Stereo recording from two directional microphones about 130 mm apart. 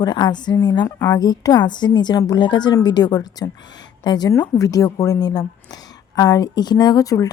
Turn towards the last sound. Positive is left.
turn(degrees=25)  # may be behind; listen again after turning